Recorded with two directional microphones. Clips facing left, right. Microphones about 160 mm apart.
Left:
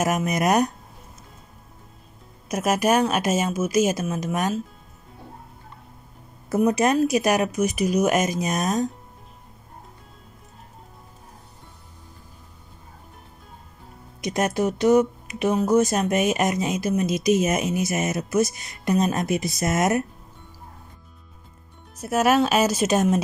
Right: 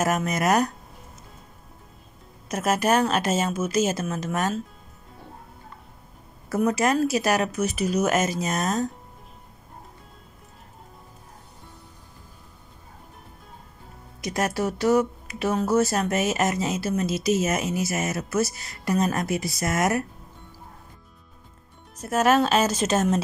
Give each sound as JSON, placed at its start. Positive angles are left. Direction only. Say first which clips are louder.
{"t": 0.0, "sound": "speech", "louder": "left 1 dB", "side_deg": 15}
{"t": 2.4, "sound": "speech", "louder": "left 2 dB", "side_deg": 15}
{"t": 6.5, "sound": "speech", "louder": "left 2 dB", "side_deg": 20}
{"t": 14.2, "sound": "speech", "louder": "left 3 dB", "side_deg": 20}
{"t": 21.9, "sound": "speech", "louder": "left 1 dB", "side_deg": 10}